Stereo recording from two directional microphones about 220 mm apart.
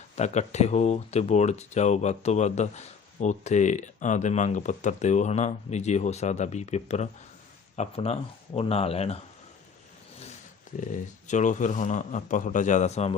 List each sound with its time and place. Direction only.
0.2 s speech: 30° left (ahead or behind)
10.8 s speech: 35° left (ahead or behind)